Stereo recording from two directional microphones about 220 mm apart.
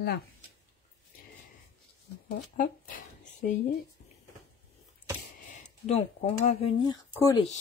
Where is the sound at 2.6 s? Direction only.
40° left (ahead or behind).